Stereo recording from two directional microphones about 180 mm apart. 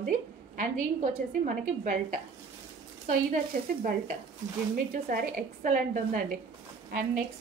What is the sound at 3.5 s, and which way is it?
Speech, 50° right (ahead or behind).